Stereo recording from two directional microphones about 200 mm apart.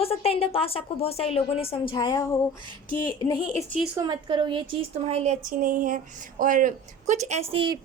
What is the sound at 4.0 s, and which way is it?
A woman's voice, 20° right (ahead or behind).